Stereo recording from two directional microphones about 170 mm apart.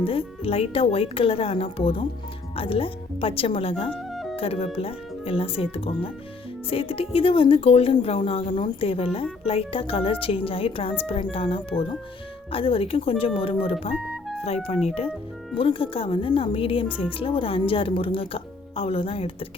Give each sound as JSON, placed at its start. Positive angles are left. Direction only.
{"t": 0.0, "sound": "speech", "side_deg": 35}
{"t": 4.1, "sound": "music", "side_deg": 0}
{"t": 4.4, "sound": "speech", "side_deg": 35}